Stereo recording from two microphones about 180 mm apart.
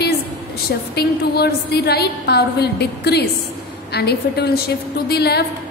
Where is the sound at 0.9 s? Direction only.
60° left (ahead or behind).